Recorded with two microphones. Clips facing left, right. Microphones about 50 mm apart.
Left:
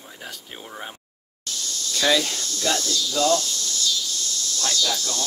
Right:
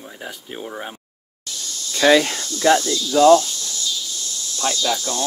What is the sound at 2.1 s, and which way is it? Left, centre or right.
Speech, right.